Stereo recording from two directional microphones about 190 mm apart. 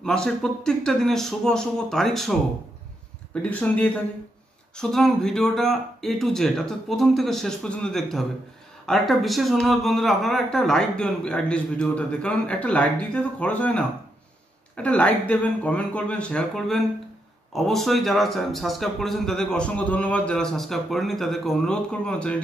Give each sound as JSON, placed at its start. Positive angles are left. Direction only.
{"t": 0.0, "sound": "speech", "side_deg": 5}
{"t": 3.4, "sound": "speech", "side_deg": 10}